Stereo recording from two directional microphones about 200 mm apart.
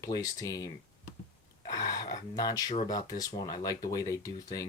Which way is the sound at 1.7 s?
20° left (ahead or behind).